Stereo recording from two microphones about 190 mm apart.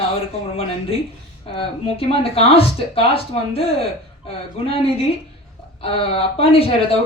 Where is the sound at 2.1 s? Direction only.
30° left (ahead or behind).